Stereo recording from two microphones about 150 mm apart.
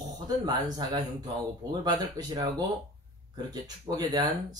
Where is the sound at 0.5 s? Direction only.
25° right (ahead or behind).